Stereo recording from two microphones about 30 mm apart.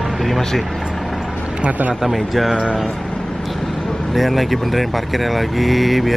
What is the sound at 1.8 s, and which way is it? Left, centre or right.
Speech, right.